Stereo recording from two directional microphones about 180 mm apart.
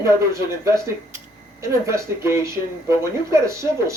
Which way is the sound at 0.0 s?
15° right (ahead or behind).